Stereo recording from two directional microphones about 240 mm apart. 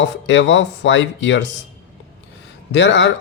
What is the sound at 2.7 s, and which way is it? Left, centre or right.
Speech, left.